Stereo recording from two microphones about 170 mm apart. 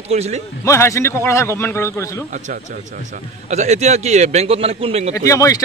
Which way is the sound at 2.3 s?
45° right (ahead or behind).